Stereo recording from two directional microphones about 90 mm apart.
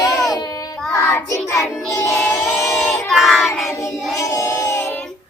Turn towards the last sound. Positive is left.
turn(degrees=30)  # may be behind; listen again after turning